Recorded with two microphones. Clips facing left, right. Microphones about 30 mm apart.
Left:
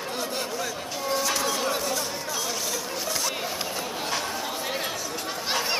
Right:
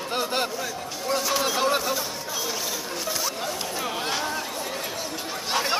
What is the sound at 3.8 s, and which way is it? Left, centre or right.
Chatter, right.